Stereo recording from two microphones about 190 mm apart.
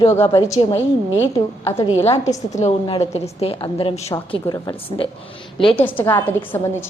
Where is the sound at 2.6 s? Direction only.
35° left (ahead or behind).